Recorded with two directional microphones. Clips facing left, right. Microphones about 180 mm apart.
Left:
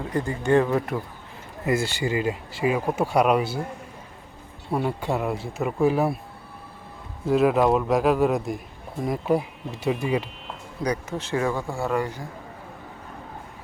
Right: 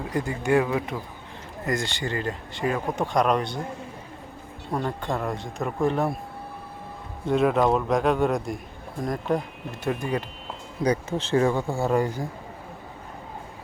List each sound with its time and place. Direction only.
0.1 s speech: 15° right (ahead or behind)
1.6 s speech: 5° left (ahead or behind)
4.7 s speech: 10° left (ahead or behind)
7.3 s speech: 5° left (ahead or behind)
10.8 s speech: 30° right (ahead or behind)